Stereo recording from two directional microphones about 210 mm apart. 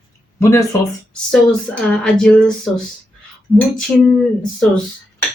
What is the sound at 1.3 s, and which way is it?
Speech, 5° left (ahead or behind).